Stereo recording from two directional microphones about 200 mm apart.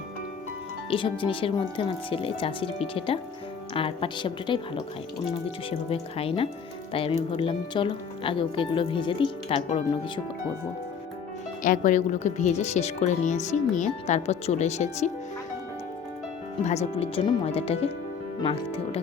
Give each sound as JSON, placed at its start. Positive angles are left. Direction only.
{"t": 0.9, "sound": "speech", "side_deg": 25}
{"t": 5.9, "sound": "speech", "side_deg": 30}
{"t": 11.6, "sound": "speech", "side_deg": 40}
{"t": 16.6, "sound": "speech", "side_deg": 35}